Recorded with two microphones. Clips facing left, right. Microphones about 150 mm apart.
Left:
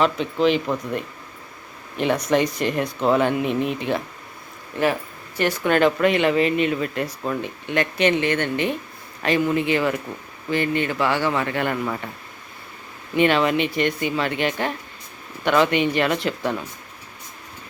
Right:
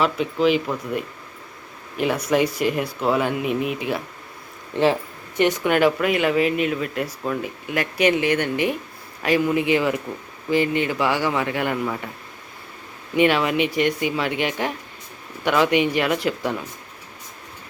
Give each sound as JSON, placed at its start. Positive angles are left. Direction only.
{"t": 0.0, "sound": "speech", "side_deg": -5}
{"t": 4.7, "sound": "speech", "side_deg": -25}
{"t": 13.1, "sound": "speech", "side_deg": -10}